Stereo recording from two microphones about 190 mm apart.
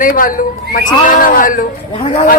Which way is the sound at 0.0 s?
45° left (ahead or behind).